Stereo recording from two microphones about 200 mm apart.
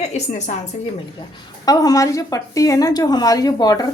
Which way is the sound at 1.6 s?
20° left (ahead or behind).